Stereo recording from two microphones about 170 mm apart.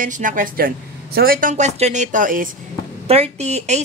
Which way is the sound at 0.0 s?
50° right (ahead or behind).